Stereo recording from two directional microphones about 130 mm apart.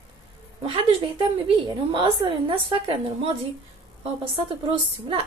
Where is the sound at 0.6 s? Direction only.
45° right (ahead or behind).